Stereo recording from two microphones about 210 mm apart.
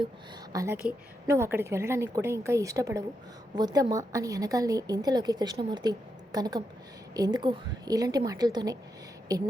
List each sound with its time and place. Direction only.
0.5 s a woman's voice: 15° right (ahead or behind)